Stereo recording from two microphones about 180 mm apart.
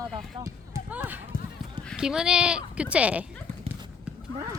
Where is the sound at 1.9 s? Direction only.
5° right (ahead or behind).